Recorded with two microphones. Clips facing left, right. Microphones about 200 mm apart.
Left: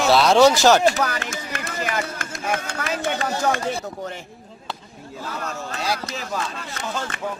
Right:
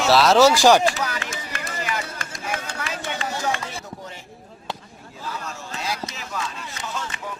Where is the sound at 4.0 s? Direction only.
60° left (ahead or behind).